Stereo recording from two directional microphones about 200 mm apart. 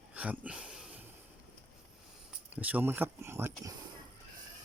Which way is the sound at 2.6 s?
10° right (ahead or behind).